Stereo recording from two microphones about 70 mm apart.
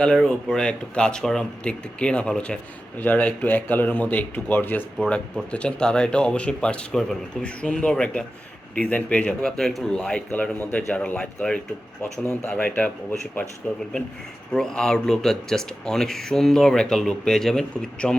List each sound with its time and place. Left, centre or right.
0.0 s speech: centre; by 4.9 s left
4.9 s speech: centre
9.4 s speech: centre
10.3 s speech: left